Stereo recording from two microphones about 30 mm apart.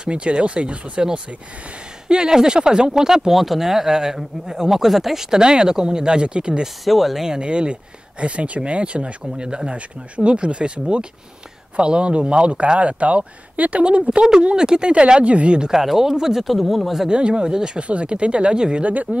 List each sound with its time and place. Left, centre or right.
0.1 s speech: right
2.0 s speech: right
3.3 s speech: centre
4.6 s speech: centre
5.4 s speech: right
6.8 s speech: centre
7.3 s speech: right
13.8 s speech: right
14.2 s speech: right
15.7 s speech: centre
16.4 s speech: centre
17.1 s speech: right
18.8 s speech: right